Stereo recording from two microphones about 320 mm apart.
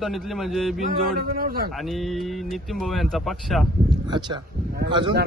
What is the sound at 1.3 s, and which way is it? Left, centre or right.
Speech, right.